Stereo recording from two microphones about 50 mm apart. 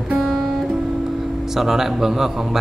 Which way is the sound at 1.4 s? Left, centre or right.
Centre.